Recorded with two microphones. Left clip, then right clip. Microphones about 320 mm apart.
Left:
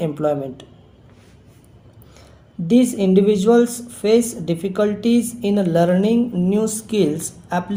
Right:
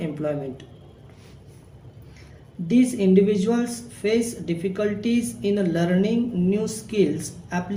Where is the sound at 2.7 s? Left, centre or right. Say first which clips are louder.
Left 4 dB; left.